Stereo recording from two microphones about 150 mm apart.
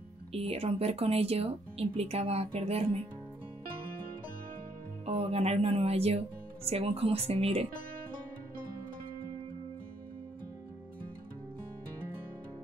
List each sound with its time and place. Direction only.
0.3 s speech: 40° right (ahead or behind)
5.0 s speech: 45° right (ahead or behind)